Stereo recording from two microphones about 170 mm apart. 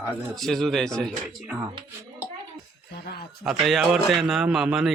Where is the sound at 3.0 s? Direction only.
65° left (ahead or behind).